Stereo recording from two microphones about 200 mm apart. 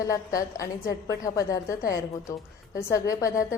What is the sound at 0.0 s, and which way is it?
A woman's voice, 15° left (ahead or behind).